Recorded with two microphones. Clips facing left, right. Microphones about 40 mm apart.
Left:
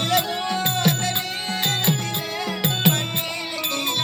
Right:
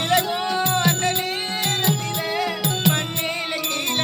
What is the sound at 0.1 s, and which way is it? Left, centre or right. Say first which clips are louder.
Music: right 3 dB; right.